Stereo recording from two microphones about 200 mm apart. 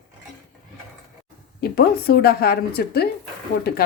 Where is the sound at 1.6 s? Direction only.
50° left (ahead or behind).